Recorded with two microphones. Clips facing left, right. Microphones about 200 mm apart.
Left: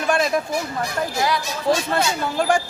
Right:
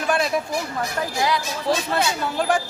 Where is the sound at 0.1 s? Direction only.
Centre (ahead or behind).